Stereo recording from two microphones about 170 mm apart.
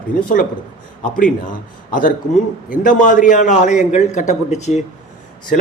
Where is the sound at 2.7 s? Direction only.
50° left (ahead or behind).